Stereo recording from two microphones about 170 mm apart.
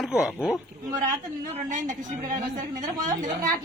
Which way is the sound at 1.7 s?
50° right (ahead or behind).